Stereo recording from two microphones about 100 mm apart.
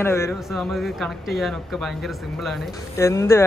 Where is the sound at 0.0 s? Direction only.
25° left (ahead or behind).